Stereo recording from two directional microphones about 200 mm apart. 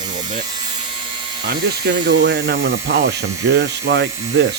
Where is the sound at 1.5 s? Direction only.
55° right (ahead or behind).